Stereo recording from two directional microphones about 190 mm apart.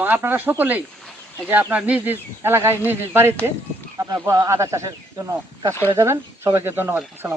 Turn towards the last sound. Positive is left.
turn(degrees=-10)  # may be behind; listen again after turning